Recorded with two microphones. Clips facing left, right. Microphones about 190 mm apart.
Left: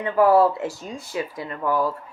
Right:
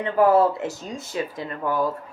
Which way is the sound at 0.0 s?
20° right (ahead or behind).